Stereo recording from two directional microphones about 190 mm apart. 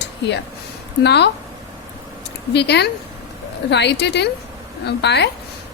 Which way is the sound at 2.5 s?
65° left (ahead or behind).